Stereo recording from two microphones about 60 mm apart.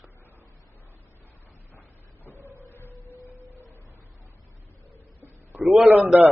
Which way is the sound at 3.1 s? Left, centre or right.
Right.